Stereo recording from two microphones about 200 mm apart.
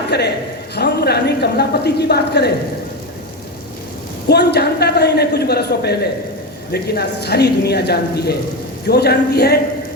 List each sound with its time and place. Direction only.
0.1 s a woman's voice: 55° left (ahead or behind)
4.3 s a woman's voice: 55° left (ahead or behind)